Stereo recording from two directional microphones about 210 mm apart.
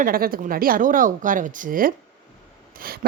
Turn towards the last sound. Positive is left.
turn(degrees=-45)  # may be behind; listen again after turning